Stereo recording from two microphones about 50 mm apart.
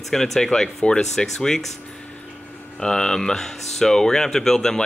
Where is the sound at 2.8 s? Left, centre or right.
Centre.